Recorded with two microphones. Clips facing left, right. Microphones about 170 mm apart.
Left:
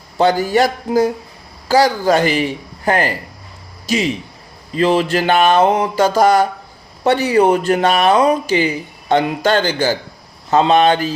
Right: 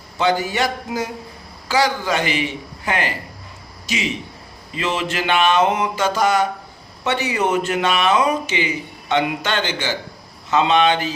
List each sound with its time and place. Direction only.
0.2 s speech: 40° left (ahead or behind)